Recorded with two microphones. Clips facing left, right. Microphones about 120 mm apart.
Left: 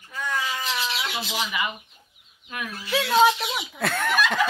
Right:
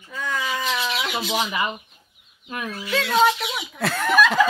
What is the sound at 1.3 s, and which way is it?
Speech, 35° right (ahead or behind).